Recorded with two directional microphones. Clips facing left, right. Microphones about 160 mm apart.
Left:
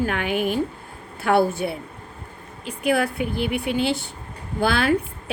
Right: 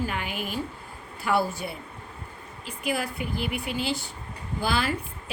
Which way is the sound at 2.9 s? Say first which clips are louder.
Left 8 dB; 65° left (ahead or behind).